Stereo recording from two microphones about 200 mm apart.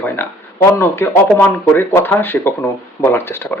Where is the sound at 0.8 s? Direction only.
10° left (ahead or behind).